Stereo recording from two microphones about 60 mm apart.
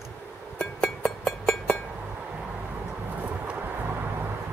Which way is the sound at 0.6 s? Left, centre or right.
Centre.